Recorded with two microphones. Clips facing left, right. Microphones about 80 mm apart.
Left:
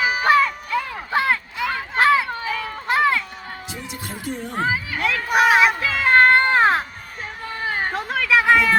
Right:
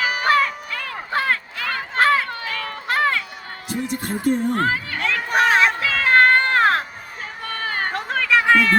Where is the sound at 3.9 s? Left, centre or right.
Right.